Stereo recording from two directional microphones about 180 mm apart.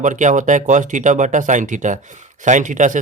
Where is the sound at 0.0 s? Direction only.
45° right (ahead or behind).